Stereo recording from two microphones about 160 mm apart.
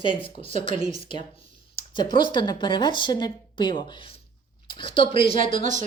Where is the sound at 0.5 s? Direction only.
50° right (ahead or behind).